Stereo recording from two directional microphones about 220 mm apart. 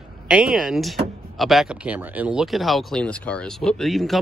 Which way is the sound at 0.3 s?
5° right (ahead or behind).